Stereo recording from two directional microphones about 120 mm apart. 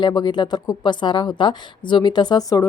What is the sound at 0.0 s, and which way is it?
A woman's voice, 35° left (ahead or behind).